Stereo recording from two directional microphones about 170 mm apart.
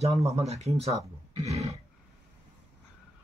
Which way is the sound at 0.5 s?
40° right (ahead or behind).